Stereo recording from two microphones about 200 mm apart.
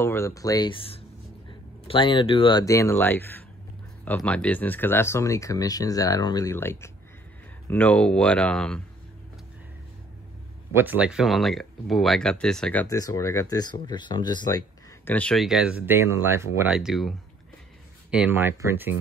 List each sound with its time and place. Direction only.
0.0 s speech: 15° left (ahead or behind)
10.7 s speech: 10° right (ahead or behind)
12.8 s speech: 15° left (ahead or behind)
15.0 s speech: 5° left (ahead or behind)
18.1 s speech: 10° right (ahead or behind)